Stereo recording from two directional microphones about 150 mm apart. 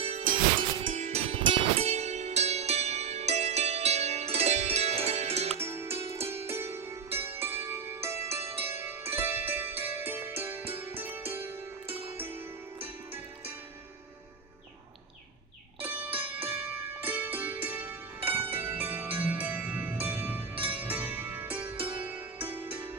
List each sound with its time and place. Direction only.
0.0 s music: 45° right (ahead or behind)
5.5 s music: 15° right (ahead or behind)
15.8 s music: 10° right (ahead or behind)